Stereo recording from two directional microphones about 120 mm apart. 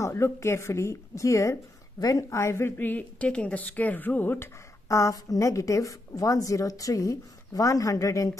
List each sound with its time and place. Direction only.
0.0 s a woman's voice: 20° left (ahead or behind)